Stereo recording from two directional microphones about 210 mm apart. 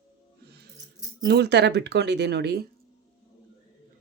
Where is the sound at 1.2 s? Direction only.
55° right (ahead or behind).